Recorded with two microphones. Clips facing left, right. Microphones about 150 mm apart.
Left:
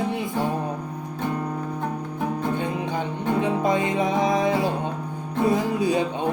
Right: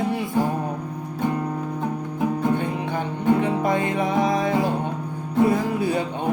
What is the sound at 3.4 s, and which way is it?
Music, 20° left (ahead or behind).